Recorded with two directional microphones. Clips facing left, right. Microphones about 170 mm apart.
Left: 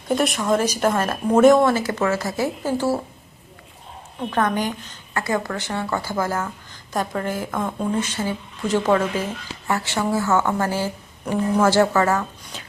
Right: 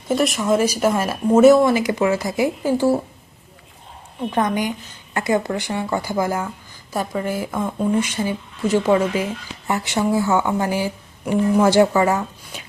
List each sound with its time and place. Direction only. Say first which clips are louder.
0.1 s speech: right 2 dB; centre (ahead or behind)
4.3 s speech: right 1 dB; 15° right (ahead or behind)